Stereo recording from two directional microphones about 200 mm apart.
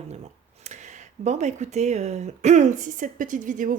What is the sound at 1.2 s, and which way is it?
Speech, 35° right (ahead or behind).